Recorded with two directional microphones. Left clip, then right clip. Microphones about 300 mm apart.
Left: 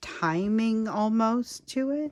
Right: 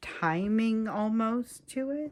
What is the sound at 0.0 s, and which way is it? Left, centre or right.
Speech, centre.